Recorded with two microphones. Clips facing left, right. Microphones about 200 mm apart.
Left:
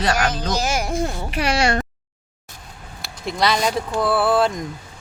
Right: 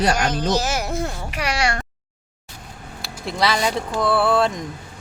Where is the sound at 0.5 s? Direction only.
15° left (ahead or behind).